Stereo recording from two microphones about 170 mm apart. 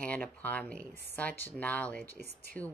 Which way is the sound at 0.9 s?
75° right (ahead or behind).